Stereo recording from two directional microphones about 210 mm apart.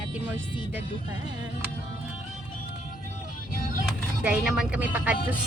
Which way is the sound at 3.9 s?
5° right (ahead or behind).